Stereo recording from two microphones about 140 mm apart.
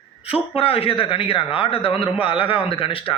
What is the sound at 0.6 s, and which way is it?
A man's voice, 40° left (ahead or behind).